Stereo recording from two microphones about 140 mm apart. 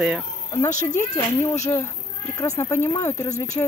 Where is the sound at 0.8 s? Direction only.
20° left (ahead or behind).